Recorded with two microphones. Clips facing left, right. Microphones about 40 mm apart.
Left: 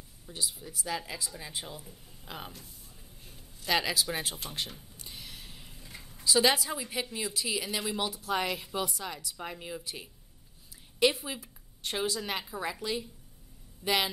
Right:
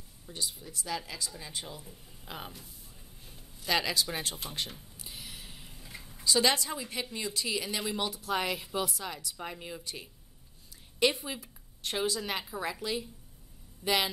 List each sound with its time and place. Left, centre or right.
0.3 s speech: centre